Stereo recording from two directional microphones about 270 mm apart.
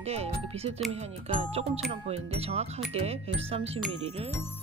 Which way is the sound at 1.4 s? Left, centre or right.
Right.